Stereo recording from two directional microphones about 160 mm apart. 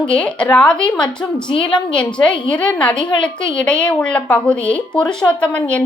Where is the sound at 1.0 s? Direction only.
30° left (ahead or behind).